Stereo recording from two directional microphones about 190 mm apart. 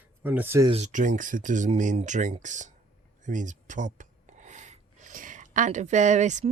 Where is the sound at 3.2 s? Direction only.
40° right (ahead or behind).